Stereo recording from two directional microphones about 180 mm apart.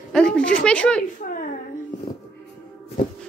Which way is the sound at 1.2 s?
50° left (ahead or behind).